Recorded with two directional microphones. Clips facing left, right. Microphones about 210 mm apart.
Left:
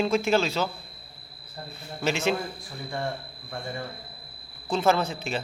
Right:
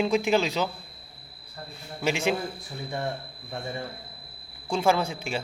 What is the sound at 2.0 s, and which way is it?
Speech, 15° right (ahead or behind).